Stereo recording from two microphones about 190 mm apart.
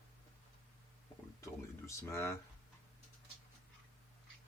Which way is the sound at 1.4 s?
15° left (ahead or behind).